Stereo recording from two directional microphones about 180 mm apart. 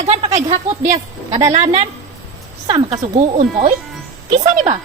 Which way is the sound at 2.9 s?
40° right (ahead or behind).